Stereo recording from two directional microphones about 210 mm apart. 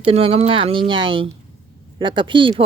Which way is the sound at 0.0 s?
25° right (ahead or behind).